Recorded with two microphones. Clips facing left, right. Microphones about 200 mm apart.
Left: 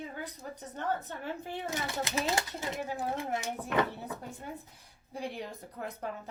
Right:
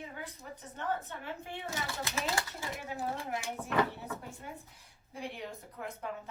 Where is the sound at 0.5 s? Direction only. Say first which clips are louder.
Left 2 dB; 40° left (ahead or behind).